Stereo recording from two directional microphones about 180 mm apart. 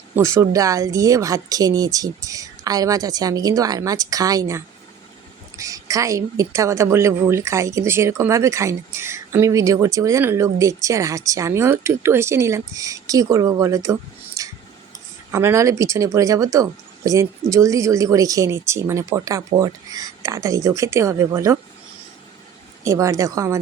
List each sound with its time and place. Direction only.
0.2 s a woman's voice: 15° right (ahead or behind)
14.4 s tick: 20° right (ahead or behind)
15.3 s a woman's voice: 15° right (ahead or behind)
22.8 s a woman's voice: 15° right (ahead or behind)